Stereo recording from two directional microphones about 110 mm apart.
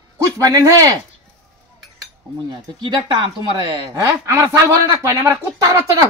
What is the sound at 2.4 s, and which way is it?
Speech, 45° right (ahead or behind).